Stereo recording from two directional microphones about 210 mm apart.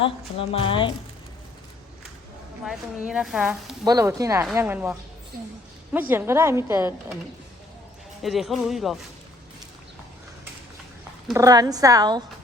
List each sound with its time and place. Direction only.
0.0 s speech: 25° left (ahead or behind)
3.1 s speech: 5° right (ahead or behind)
3.8 s a woman's voice: 15° right (ahead or behind)
8.2 s speech: centre (ahead or behind)
11.3 s a woman's voice: 15° right (ahead or behind)